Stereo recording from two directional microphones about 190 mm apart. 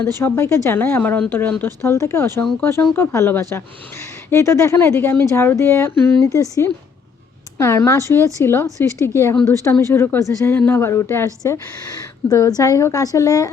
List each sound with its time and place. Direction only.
0.2 s speech: 10° left (ahead or behind)
12.3 s speech: 20° left (ahead or behind)